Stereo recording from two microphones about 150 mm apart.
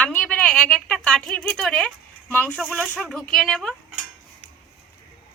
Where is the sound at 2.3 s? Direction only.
10° left (ahead or behind).